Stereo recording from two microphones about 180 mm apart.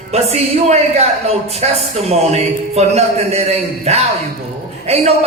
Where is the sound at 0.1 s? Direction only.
35° right (ahead or behind).